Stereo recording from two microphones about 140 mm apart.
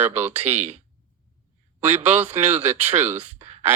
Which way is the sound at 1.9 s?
55° right (ahead or behind).